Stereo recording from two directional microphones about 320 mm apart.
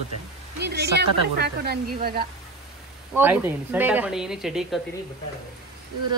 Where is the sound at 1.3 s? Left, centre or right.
Right.